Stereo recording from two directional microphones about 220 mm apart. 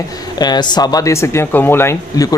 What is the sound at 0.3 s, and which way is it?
Speech, 20° left (ahead or behind).